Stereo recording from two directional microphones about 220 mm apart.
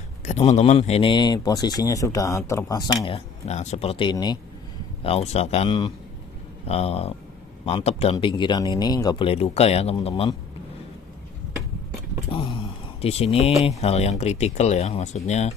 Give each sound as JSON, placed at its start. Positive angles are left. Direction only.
{"t": 0.2, "sound": "speech", "side_deg": 30}
{"t": 3.4, "sound": "speech", "side_deg": 30}
{"t": 12.3, "sound": "a sound", "side_deg": 20}
{"t": 13.7, "sound": "speech", "side_deg": 30}